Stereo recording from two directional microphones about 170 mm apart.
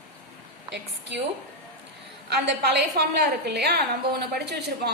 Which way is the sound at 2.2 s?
70° right (ahead or behind).